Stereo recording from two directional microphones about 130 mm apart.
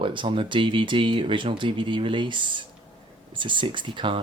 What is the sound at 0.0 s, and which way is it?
Speech, 40° right (ahead or behind).